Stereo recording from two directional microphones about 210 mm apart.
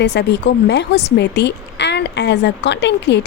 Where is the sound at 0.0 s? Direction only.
50° left (ahead or behind).